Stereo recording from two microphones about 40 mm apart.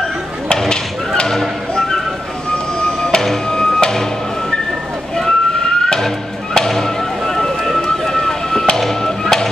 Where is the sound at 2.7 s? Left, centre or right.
Left.